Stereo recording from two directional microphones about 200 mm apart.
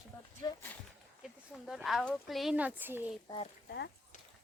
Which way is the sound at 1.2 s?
Centre (ahead or behind).